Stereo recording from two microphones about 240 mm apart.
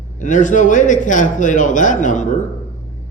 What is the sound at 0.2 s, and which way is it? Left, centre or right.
Speech, left.